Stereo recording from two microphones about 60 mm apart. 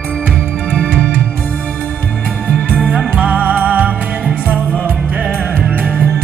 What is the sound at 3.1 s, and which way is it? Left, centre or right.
Music, right.